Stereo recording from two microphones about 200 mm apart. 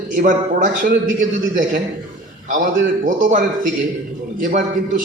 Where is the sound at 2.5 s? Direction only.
40° right (ahead or behind).